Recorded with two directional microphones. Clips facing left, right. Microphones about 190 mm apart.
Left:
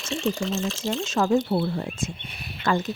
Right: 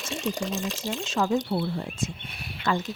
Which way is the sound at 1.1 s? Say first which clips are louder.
Left 3 dB; 45° left (ahead or behind).